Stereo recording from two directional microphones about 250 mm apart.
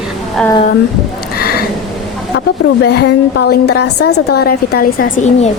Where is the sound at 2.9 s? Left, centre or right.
Left.